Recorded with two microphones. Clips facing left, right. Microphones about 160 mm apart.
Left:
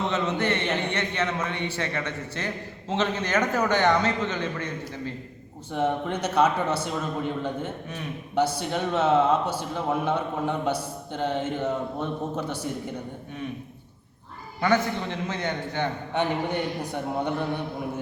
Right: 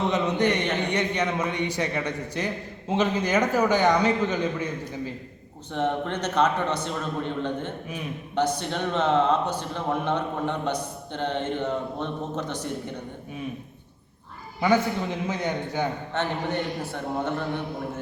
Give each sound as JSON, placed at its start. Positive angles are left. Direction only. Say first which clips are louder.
{"t": 0.1, "sound": "a man's voice", "louder": "right 2 dB", "side_deg": -15}
{"t": 5.7, "sound": "a man's voice", "louder": "even", "side_deg": 10}
{"t": 14.6, "sound": "a man's voice", "louder": "right 1 dB", "side_deg": -10}
{"t": 16.1, "sound": "a man's voice", "louder": "left 3 dB", "side_deg": 15}